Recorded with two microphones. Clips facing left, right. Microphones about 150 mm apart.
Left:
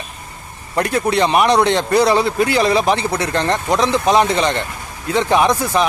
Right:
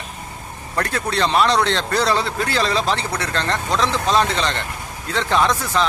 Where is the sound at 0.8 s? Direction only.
15° left (ahead or behind).